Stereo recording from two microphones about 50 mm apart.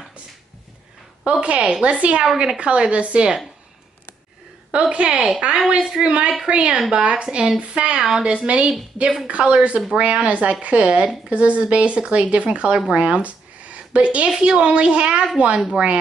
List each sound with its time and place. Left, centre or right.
1.3 s speech: right
4.9 s speech: centre
8.0 s speech: centre
8.3 s speech: right
12.9 s a sound: right
14.3 s speech: centre